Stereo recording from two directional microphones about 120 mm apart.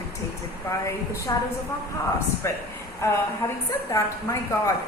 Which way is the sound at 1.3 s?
30° left (ahead or behind).